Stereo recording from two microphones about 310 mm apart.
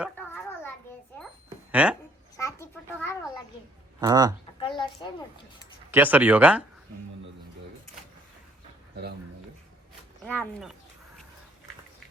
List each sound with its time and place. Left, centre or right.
0.0 s children playing: centre
1.7 s speech: centre
2.3 s a sound: centre
4.0 s speech: centre
4.6 s a sound: centre
5.9 s speech: centre
10.2 s speech: centre